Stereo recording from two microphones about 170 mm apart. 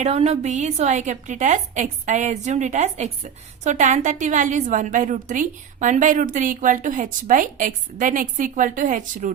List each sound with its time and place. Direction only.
0.0 s a woman's voice: 40° right (ahead or behind)